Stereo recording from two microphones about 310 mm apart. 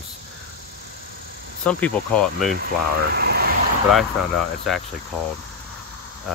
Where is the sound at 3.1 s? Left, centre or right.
Right.